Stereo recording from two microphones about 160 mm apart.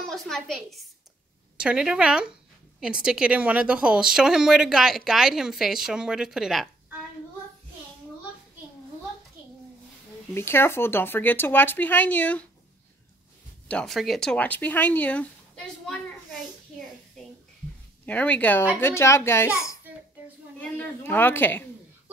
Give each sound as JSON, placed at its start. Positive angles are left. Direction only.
{"t": 0.0, "sound": "a woman's voice", "side_deg": 0}
{"t": 10.3, "sound": "speech", "side_deg": 15}
{"t": 13.7, "sound": "speech", "side_deg": 5}
{"t": 18.0, "sound": "speech", "side_deg": 10}
{"t": 20.6, "sound": "speech", "side_deg": 10}